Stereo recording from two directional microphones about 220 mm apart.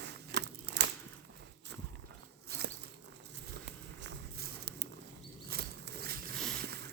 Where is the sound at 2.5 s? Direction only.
45° right (ahead or behind).